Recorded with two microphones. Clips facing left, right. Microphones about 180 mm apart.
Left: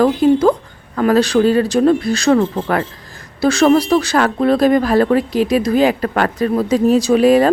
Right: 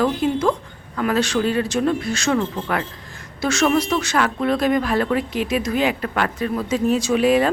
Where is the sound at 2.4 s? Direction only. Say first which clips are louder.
Left 6 dB; 45° left (ahead or behind).